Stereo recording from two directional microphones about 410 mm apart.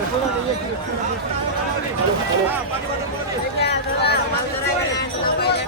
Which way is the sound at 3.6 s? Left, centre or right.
Left.